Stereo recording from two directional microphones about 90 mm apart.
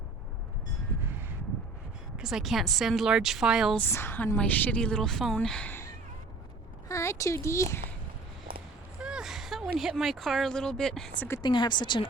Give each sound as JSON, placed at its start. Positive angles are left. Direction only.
{"t": 2.1, "sound": "a woman's voice", "side_deg": -5}
{"t": 3.8, "sound": "a woman's voice", "side_deg": 25}
{"t": 6.8, "sound": "a sound", "side_deg": 35}
{"t": 7.3, "sound": "speech", "side_deg": 30}
{"t": 9.0, "sound": "speech", "side_deg": -10}
{"t": 11.4, "sound": "speech", "side_deg": 55}